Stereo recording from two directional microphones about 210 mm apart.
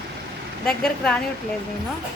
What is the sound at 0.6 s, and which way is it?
Speech, 5° left (ahead or behind).